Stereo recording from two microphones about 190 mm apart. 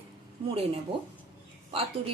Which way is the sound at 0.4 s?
30° right (ahead or behind).